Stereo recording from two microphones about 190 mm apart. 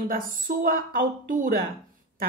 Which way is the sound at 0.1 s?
50° right (ahead or behind).